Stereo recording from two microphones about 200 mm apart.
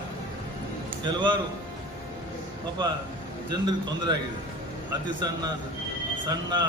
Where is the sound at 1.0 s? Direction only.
25° right (ahead or behind).